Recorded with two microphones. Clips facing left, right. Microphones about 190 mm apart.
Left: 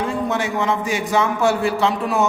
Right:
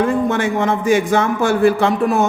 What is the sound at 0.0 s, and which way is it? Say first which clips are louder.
Speech: right 5 dB; 50° right (ahead or behind).